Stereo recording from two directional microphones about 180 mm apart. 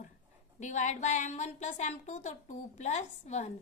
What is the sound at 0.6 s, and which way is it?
A woman's voice, 40° left (ahead or behind).